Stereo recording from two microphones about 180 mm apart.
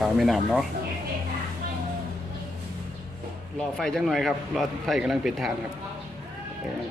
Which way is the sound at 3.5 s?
Centre (ahead or behind).